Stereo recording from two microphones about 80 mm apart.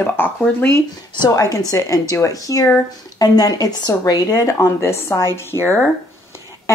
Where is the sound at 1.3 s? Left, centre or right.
Left.